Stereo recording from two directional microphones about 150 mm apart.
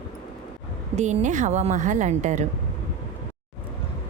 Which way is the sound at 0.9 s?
50° right (ahead or behind).